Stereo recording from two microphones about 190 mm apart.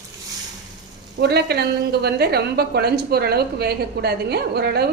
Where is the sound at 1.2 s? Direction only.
60° right (ahead or behind).